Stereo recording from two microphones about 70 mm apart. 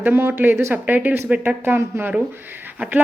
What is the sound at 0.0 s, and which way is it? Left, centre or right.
Speech, right.